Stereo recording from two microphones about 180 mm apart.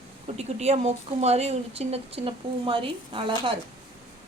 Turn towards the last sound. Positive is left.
turn(degrees=-30)  # may be behind; listen again after turning